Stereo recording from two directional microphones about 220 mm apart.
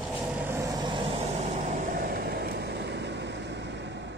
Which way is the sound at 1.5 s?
35° right (ahead or behind).